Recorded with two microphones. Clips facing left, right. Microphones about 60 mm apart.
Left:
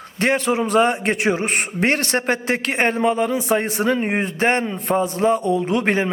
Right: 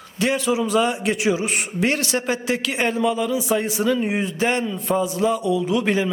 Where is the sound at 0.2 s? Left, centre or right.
Left.